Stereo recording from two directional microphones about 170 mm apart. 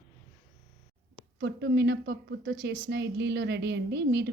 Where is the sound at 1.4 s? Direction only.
80° right.